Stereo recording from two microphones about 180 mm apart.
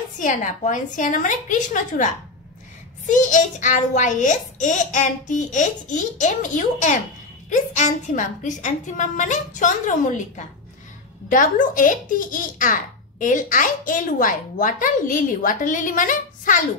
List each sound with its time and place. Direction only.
0.2 s a child's voice: 45° left (ahead or behind)